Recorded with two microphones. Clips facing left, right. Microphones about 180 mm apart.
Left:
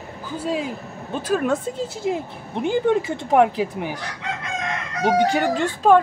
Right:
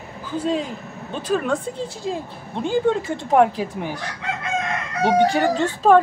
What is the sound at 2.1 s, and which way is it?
Speech, 20° left (ahead or behind).